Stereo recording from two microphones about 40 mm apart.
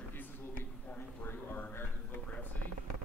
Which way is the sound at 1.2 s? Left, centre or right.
Left.